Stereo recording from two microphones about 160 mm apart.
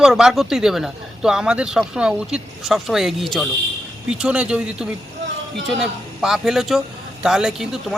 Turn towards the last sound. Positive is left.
turn(degrees=-5)  # may be behind; listen again after turning